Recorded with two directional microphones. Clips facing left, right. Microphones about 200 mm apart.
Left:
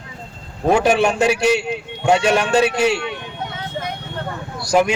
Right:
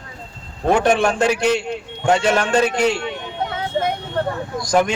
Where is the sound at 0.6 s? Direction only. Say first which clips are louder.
Left 1 dB; 10° left (ahead or behind).